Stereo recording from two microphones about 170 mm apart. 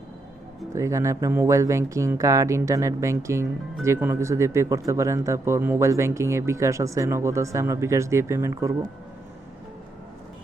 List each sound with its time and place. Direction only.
0.7 s speech: 15° right (ahead or behind)